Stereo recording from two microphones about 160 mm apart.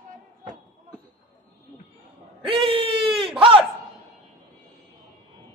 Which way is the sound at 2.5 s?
35° right (ahead or behind).